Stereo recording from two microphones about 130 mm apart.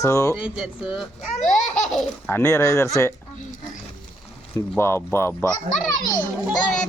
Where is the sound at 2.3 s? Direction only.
20° left (ahead or behind).